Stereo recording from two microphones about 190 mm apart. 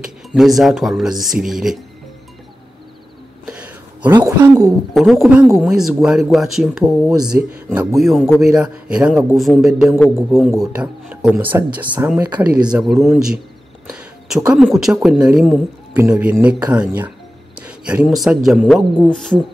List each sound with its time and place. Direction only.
0.3 s a man's voice: centre (ahead or behind)
3.4 s a sound: 5° right (ahead or behind)
4.1 s speech: 15° right (ahead or behind)
4.9 s a man's voice: centre (ahead or behind)
13.8 s a sound: 5° right (ahead or behind)
14.5 s a man's voice: centre (ahead or behind)